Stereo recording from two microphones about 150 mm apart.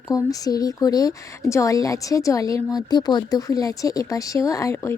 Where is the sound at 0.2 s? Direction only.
25° left (ahead or behind).